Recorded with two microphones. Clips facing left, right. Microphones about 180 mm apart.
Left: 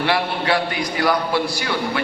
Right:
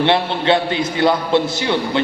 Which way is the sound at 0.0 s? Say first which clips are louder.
Right 4 dB; 25° right (ahead or behind).